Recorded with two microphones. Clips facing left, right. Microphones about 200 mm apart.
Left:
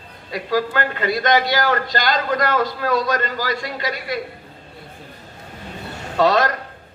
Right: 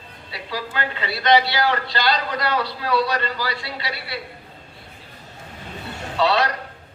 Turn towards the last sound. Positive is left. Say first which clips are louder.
# left 3 dB
turn(degrees=45)  # may be behind; listen again after turning